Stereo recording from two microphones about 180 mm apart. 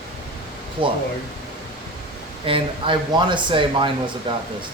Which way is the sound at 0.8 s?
30° right (ahead or behind).